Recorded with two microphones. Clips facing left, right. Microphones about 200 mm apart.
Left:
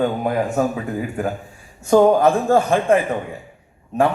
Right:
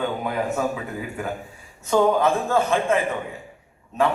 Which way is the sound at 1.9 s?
45° left (ahead or behind).